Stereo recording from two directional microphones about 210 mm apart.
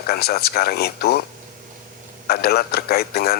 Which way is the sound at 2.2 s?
50° left (ahead or behind).